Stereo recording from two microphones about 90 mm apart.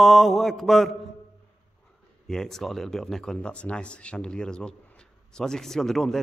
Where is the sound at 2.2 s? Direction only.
5° left (ahead or behind).